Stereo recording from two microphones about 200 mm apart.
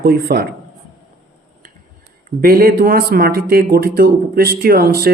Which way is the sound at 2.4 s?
45° right (ahead or behind).